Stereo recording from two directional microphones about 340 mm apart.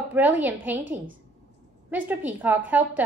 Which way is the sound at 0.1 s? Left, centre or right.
Centre.